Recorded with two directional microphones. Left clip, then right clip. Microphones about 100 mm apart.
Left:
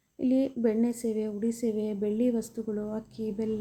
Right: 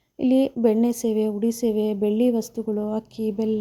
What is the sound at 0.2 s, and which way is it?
A woman's voice, 90° right.